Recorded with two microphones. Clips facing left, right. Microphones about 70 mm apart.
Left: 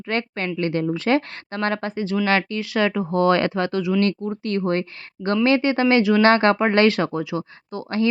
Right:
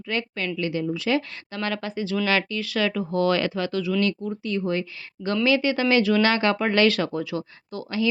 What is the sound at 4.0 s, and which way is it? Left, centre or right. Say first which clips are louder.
Speech: left 3 dB; left.